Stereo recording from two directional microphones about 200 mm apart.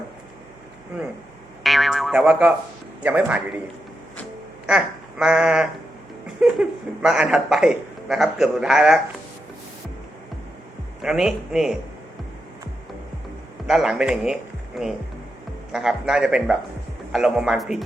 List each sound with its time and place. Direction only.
1.6 s boing: centre (ahead or behind)
3.0 s a man's voice: 10° right (ahead or behind)
4.6 s a sound: 5° right (ahead or behind)
6.4 s a man's voice: 5° right (ahead or behind)
11.0 s a man's voice: centre (ahead or behind)
13.7 s a man's voice: centre (ahead or behind)